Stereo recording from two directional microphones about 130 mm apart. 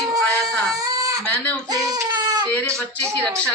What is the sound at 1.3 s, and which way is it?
Speech, 10° left (ahead or behind).